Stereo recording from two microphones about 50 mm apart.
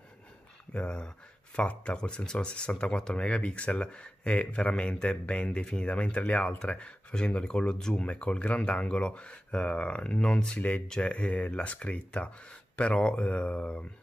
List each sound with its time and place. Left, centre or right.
0.7 s speech: centre